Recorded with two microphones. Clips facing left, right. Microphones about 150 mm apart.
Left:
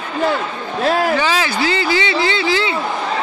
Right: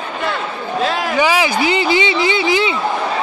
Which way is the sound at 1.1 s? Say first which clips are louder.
Right 2 dB; 15° right (ahead or behind).